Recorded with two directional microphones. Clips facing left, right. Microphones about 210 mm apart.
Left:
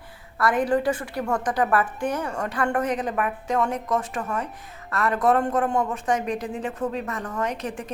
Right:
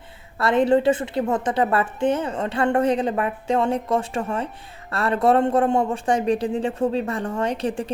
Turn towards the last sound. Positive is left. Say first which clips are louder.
# right 5 dB
turn(degrees=-30)  # may be behind; listen again after turning